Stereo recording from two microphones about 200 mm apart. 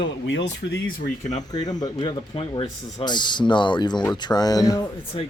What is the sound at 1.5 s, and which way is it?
Speech, 20° left (ahead or behind).